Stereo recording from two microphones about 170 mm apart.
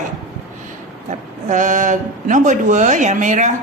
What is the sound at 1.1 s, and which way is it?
Speech, 45° right (ahead or behind).